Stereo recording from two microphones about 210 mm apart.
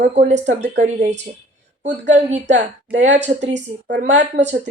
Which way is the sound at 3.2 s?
35° right (ahead or behind).